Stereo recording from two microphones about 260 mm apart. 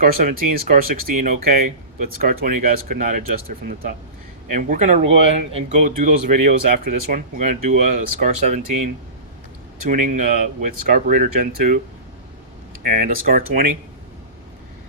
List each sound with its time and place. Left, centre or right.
0.0 s speech: right
9.9 s speech: right
12.8 s speech: right